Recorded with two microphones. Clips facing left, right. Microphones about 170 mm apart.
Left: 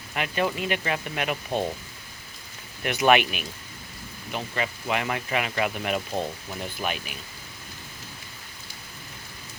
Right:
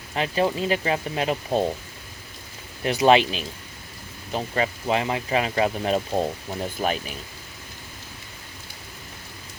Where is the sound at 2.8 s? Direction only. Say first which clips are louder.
Right 3 dB; 30° right (ahead or behind).